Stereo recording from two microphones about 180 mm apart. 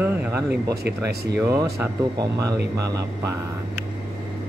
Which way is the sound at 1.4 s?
15° right (ahead or behind).